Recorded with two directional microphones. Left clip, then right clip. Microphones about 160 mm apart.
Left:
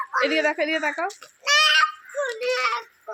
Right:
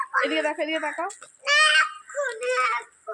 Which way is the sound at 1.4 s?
Centre (ahead or behind).